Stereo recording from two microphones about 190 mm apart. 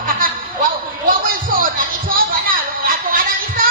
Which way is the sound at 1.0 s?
45° right (ahead or behind).